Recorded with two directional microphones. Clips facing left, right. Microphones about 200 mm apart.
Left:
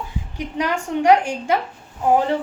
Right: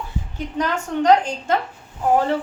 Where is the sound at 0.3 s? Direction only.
10° left (ahead or behind).